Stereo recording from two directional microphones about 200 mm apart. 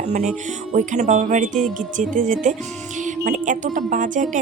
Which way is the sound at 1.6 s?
Centre (ahead or behind).